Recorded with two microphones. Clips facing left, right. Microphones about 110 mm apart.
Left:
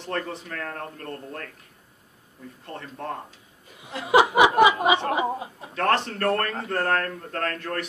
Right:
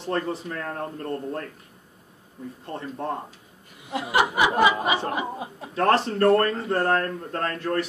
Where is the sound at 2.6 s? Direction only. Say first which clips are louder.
Right 3 dB; 20° right (ahead or behind).